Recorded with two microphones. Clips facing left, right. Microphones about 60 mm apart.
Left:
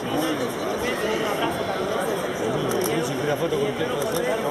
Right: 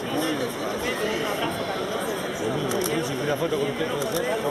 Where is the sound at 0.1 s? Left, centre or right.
Centre.